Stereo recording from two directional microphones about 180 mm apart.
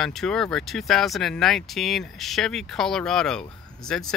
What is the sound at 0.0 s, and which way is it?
Speech, 5° left (ahead or behind).